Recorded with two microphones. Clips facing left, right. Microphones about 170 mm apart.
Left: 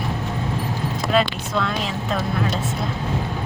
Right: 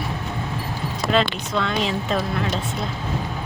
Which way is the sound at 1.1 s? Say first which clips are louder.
Left 1 dB; centre (ahead or behind).